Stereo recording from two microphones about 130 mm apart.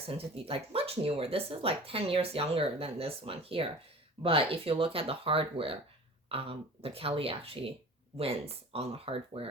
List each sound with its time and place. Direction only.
0.0 s speech: 45° right (ahead or behind)